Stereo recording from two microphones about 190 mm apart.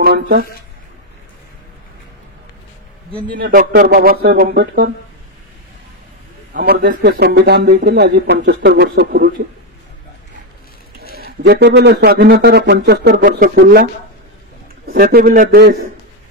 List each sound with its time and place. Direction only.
0.0 s speech: 55° right (ahead or behind)
3.3 s speech: 50° right (ahead or behind)
6.5 s a man's voice: 55° right (ahead or behind)
11.1 s a man's voice: 55° right (ahead or behind)
15.1 s speech: 50° right (ahead or behind)